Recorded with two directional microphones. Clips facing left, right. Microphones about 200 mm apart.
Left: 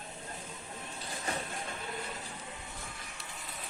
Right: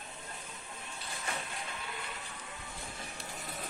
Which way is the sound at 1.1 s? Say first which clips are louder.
Left 3 dB; 35° left (ahead or behind).